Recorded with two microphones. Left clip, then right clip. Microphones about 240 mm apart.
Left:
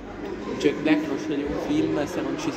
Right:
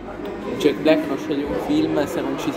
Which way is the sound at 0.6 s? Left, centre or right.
Centre.